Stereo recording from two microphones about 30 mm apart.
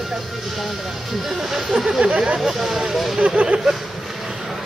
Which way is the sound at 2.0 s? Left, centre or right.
Right.